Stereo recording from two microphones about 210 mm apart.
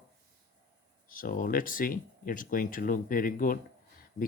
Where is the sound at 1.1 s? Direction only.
40° left (ahead or behind).